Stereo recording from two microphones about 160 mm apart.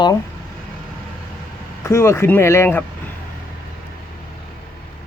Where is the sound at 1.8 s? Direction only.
15° left (ahead or behind).